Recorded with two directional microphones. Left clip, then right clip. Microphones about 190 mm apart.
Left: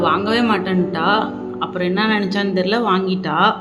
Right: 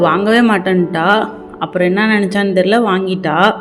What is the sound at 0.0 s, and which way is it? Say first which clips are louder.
Speech: right 5 dB; 30° right (ahead or behind).